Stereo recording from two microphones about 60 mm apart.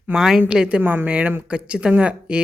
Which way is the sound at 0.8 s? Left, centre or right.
Right.